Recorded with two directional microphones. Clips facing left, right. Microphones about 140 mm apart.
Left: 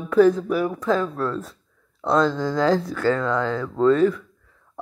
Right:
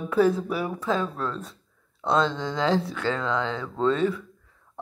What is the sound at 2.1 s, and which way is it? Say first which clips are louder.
Speech: left 5 dB; 25° right (ahead or behind).